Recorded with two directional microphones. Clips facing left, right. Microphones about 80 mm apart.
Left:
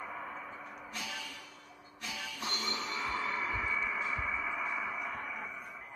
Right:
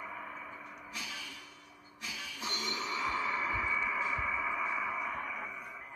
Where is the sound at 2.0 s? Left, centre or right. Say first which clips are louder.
Left 1 dB; left.